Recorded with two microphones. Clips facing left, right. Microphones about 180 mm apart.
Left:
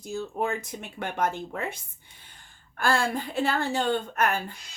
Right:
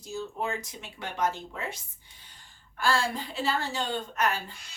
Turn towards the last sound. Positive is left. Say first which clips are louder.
# left 3 dB
turn(degrees=55)  # may be behind; listen again after turning